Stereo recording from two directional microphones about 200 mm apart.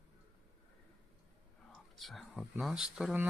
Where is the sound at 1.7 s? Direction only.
Centre (ahead or behind).